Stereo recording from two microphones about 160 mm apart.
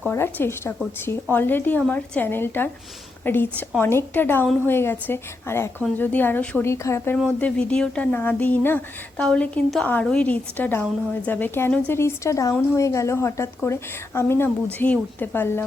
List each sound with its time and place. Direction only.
0.0 s speech: 10° left (ahead or behind)